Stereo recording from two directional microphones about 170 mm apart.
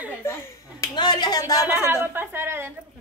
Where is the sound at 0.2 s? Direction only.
15° left (ahead or behind).